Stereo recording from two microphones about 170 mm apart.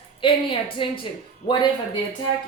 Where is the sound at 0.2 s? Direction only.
30° left (ahead or behind).